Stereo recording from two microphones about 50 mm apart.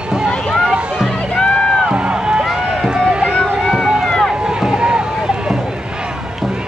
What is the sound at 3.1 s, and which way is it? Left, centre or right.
Boat, right.